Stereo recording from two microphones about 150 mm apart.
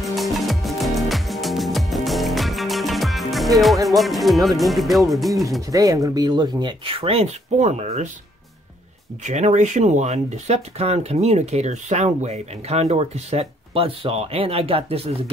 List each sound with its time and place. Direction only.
0.0 s music: centre (ahead or behind)
5.7 s speech: 20° right (ahead or behind); by 8.1 s 50° right (ahead or behind)
9.2 s speech: 50° right (ahead or behind)